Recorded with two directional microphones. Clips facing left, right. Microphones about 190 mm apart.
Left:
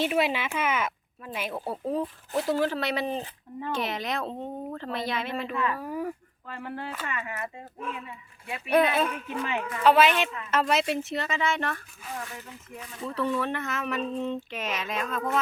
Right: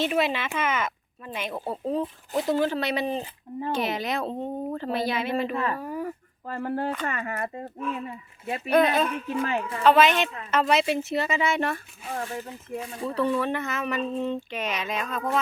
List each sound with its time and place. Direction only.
0.0 s speech: 10° left (ahead or behind)
5.5 s speech: 40° right (ahead or behind)
5.8 s speech: 10° left (ahead or behind)
6.5 s speech: 40° right (ahead or behind)
8.7 s speech: 5° left (ahead or behind)
9.2 s speech: 35° right (ahead or behind)
9.8 s speech: 10° left (ahead or behind); by 11.8 s 10° right (ahead or behind)
12.0 s speech: 30° right (ahead or behind)
13.4 s speech: centre (ahead or behind)